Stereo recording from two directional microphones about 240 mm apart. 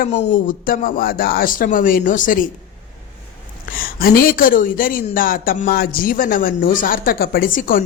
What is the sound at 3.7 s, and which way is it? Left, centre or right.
A woman's voice, left.